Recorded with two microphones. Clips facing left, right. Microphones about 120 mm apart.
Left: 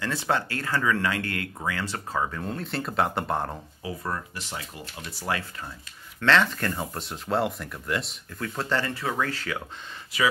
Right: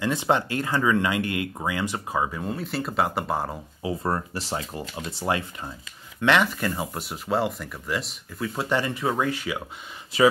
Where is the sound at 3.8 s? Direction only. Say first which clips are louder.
Right 6 dB; 25° right (ahead or behind).